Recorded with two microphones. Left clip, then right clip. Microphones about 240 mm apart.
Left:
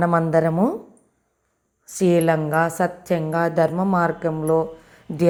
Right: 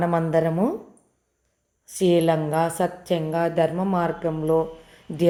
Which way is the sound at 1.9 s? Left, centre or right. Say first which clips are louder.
Left 1 dB; centre.